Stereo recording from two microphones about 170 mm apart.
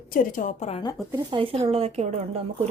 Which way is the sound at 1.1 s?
30° right (ahead or behind).